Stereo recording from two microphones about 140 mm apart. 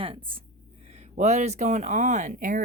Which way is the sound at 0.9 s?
50° right (ahead or behind).